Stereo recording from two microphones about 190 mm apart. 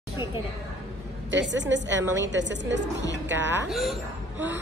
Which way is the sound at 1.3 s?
70° right (ahead or behind).